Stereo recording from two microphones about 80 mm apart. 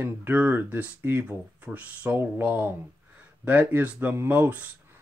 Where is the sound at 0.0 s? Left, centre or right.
Right.